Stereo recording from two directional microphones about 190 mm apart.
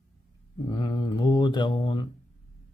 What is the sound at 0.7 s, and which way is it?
Mantra, 25° left (ahead or behind).